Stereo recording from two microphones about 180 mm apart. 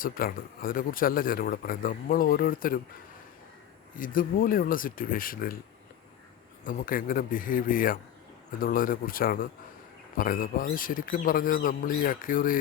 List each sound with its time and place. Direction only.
0.0 s a man's voice: 50° left (ahead or behind)
3.9 s a man's voice: 50° left (ahead or behind)
6.7 s a man's voice: 50° left (ahead or behind)